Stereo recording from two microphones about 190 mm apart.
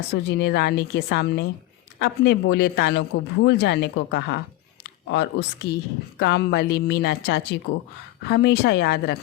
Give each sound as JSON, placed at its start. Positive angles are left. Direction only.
{"t": 0.1, "sound": "a man's voice", "side_deg": 60}